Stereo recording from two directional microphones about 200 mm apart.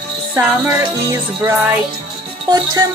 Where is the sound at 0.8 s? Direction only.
15° right (ahead or behind).